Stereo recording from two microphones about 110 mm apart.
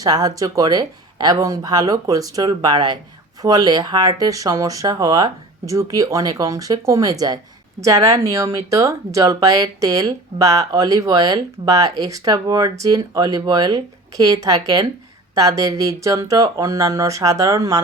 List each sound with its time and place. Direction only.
0.0 s speech: 35° right (ahead or behind)